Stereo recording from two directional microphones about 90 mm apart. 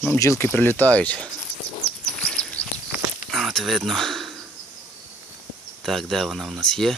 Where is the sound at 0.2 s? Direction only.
30° left (ahead or behind); by 1.3 s 15° left (ahead or behind).